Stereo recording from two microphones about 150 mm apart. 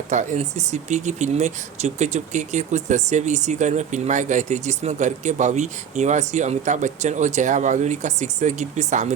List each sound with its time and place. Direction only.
0.1 s speech: 55° right (ahead or behind)